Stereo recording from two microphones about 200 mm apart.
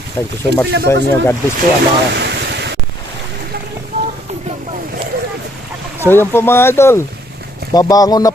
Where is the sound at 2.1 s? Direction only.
55° right (ahead or behind).